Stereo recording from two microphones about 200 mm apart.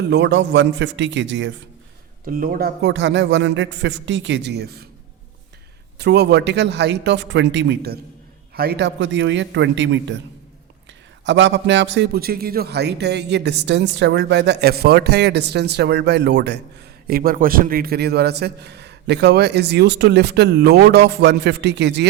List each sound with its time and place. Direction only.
0.1 s a man's voice: 60° right (ahead or behind)
2.2 s a man's voice: 45° right (ahead or behind)
6.0 s a man's voice: 55° right (ahead or behind)
11.3 s a man's voice: 65° right (ahead or behind)